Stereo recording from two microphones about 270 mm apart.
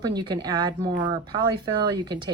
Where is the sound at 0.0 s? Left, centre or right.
Centre.